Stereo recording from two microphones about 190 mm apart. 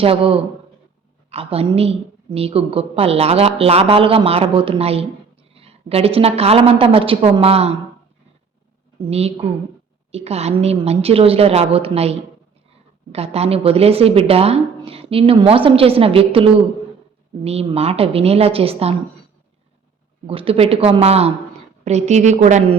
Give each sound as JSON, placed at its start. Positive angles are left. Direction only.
{"t": 0.0, "sound": "a woman's voice", "side_deg": -30}
{"t": 9.0, "sound": "a woman's voice", "side_deg": -30}
{"t": 20.2, "sound": "a woman's voice", "side_deg": -30}